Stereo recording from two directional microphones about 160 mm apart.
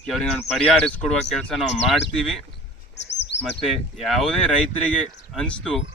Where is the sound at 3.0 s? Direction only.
90° left.